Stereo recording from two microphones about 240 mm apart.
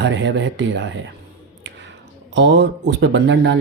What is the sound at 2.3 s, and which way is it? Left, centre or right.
Speech, right.